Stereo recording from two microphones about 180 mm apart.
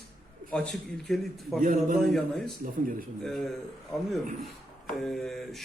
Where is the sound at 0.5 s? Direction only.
5° left (ahead or behind).